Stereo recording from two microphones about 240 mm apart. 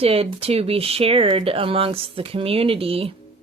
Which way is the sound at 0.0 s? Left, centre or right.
Right.